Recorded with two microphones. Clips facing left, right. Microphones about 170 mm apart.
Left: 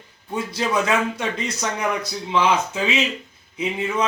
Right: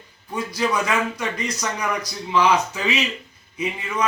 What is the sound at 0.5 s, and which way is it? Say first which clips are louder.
Speech: left 1 dB; 25° left (ahead or behind).